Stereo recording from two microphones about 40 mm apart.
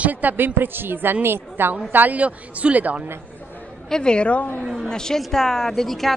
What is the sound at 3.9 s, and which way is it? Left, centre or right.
Speech, left.